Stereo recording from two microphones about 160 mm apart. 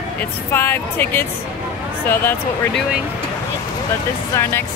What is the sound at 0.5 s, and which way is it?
Speech, 15° left (ahead or behind).